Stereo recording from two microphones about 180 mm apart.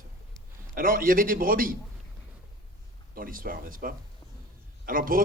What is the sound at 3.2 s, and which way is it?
Speech, 50° right (ahead or behind).